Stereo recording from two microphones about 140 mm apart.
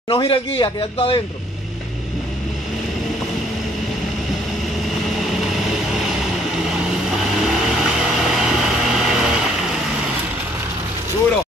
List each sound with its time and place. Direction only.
0.1 s speech: 35° left (ahead or behind)
4.8 s vehicle: centre (ahead or behind)